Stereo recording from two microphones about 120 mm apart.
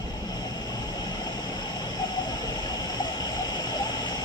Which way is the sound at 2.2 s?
35° left (ahead or behind).